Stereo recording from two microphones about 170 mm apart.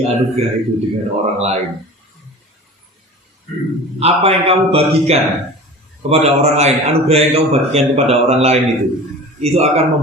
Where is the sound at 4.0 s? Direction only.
35° right (ahead or behind).